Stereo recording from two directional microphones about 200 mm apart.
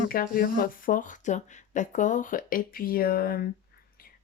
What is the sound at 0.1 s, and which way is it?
A woman's voice, 45° left (ahead or behind).